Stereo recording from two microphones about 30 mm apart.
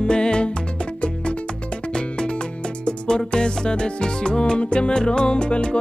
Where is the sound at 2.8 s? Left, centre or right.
Left.